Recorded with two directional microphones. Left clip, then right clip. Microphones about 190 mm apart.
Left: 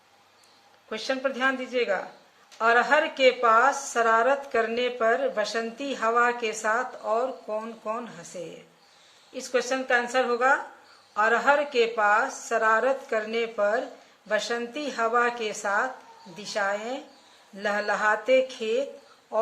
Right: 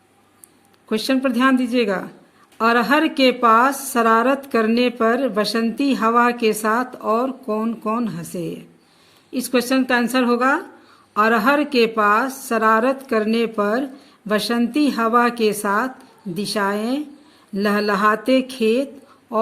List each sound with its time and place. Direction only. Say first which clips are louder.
0.9 s a woman's voice: right 8 dB; 60° right (ahead or behind)